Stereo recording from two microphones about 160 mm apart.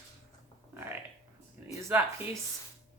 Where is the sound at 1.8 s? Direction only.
15° right (ahead or behind).